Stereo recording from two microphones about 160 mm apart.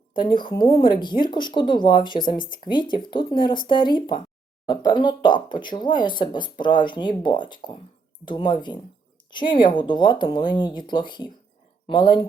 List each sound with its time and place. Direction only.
0.1 s speech: 30° left (ahead or behind)